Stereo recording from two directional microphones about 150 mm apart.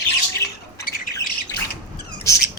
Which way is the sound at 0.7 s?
70° left (ahead or behind).